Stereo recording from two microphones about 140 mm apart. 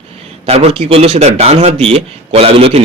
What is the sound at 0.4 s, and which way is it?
A man's voice, 45° right (ahead or behind).